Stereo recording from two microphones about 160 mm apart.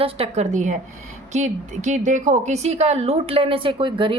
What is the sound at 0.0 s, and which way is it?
A woman's voice, 40° right (ahead or behind).